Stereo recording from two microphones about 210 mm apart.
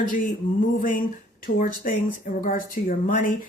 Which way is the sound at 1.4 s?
45° left (ahead or behind).